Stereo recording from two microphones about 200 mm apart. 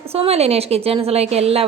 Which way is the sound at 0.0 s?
30° right (ahead or behind).